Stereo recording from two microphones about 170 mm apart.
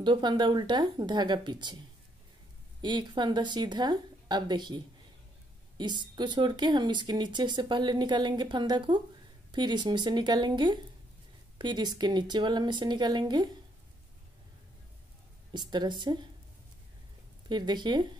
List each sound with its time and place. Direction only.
0.0 s speech: 25° right (ahead or behind)
2.8 s speech: 25° right (ahead or behind)
15.5 s speech: 25° right (ahead or behind)
17.5 s speech: 25° right (ahead or behind)